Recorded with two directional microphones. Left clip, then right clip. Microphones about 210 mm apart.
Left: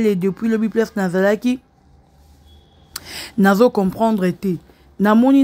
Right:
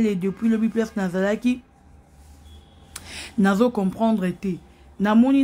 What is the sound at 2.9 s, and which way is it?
Speech, 20° left (ahead or behind).